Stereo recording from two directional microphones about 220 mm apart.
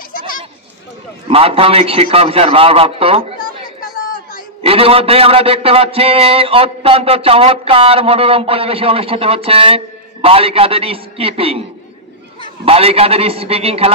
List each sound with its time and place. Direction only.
1.3 s a man's voice: 25° right (ahead or behind)
4.6 s a man's voice: 25° right (ahead or behind)
12.6 s a man's voice: 25° right (ahead or behind)